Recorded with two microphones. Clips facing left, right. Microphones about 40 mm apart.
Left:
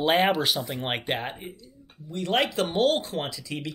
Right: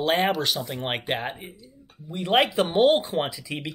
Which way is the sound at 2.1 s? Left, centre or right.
Centre.